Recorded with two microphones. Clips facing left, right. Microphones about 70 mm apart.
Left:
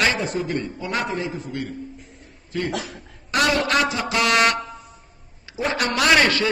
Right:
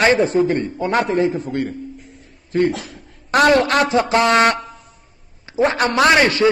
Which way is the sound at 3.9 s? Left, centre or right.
Right.